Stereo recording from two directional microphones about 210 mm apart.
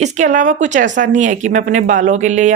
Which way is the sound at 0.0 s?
35° right (ahead or behind).